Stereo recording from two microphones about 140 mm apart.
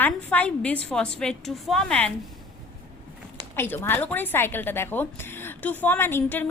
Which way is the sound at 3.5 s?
15° left (ahead or behind).